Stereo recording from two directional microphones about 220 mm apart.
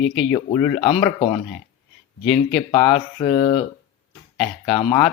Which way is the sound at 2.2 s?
Centre (ahead or behind).